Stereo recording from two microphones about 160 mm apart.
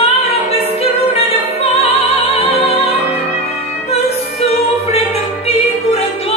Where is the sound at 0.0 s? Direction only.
40° left (ahead or behind).